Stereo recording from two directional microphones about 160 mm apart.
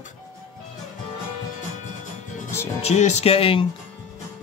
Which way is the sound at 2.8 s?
45° left (ahead or behind).